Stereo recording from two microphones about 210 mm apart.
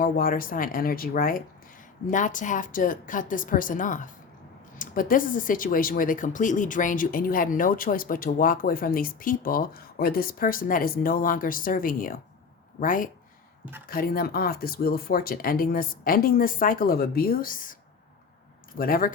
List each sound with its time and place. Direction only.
0.0 s speech: 45° left (ahead or behind)
18.8 s speech: 45° left (ahead or behind)